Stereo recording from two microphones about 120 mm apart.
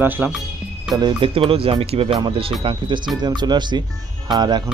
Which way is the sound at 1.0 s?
45° right (ahead or behind).